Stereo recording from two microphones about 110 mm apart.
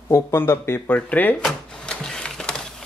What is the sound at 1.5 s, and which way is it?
Printer, 5° left (ahead or behind).